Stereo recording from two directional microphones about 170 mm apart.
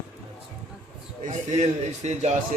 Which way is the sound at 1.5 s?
40° right (ahead or behind).